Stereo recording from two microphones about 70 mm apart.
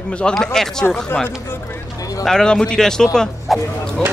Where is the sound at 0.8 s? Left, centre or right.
Left.